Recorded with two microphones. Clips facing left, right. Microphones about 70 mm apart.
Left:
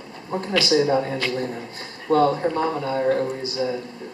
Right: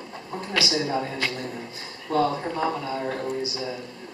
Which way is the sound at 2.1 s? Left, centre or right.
Left.